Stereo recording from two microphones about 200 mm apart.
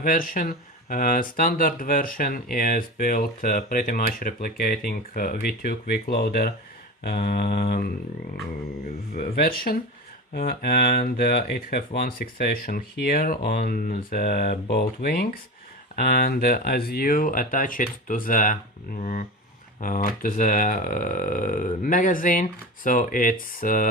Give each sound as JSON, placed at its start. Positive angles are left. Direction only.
{"t": 0.0, "sound": "speech", "side_deg": 45}
{"t": 9.1, "sound": "speech", "side_deg": 50}
{"t": 19.8, "sound": "speech", "side_deg": 45}